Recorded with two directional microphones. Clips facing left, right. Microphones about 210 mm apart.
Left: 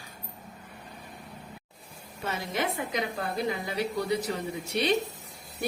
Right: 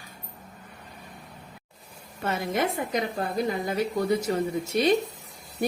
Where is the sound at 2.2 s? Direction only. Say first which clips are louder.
Right 4 dB; 50° right (ahead or behind).